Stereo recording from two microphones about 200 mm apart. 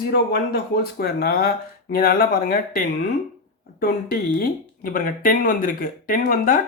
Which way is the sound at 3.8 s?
45° left (ahead or behind).